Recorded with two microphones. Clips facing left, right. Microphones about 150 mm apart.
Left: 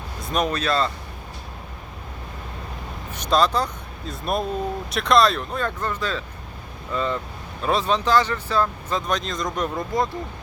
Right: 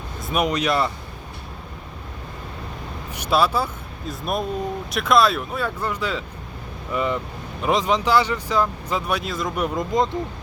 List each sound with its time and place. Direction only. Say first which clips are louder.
0.2 s a sound: right 1 dB; 5° right (ahead or behind)
0.4 s speech: right 2 dB; 15° right (ahead or behind)
3.1 s speech: even; 10° right (ahead or behind)
9.7 s speech: right 4 dB; 20° right (ahead or behind)